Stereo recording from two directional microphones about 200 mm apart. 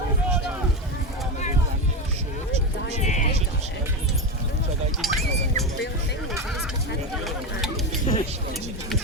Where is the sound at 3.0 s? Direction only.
35° left (ahead or behind).